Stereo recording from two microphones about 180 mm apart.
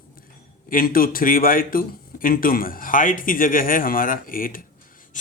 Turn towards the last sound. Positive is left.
turn(degrees=50)  # may be behind; listen again after turning